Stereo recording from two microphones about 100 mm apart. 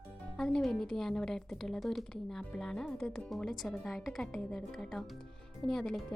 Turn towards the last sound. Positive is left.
turn(degrees=5)  # may be behind; listen again after turning